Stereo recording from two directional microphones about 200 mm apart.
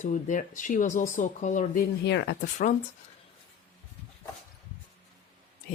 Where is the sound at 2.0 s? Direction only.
55° left (ahead or behind).